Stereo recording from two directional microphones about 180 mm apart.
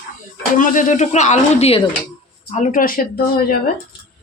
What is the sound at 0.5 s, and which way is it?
Speech, 45° left (ahead or behind).